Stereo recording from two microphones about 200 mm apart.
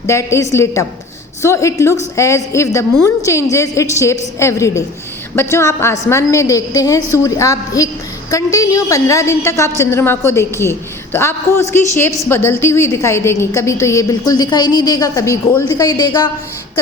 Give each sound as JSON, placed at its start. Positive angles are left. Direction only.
{"t": 0.1, "sound": "a woman's voice", "side_deg": 15}